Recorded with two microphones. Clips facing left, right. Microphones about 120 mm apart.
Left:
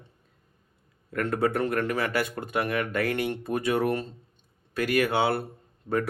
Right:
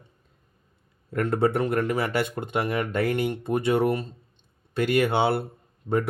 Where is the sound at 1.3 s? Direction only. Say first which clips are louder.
Right 2 dB; 25° right (ahead or behind).